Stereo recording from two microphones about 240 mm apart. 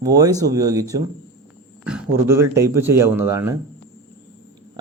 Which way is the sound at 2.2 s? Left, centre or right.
Centre.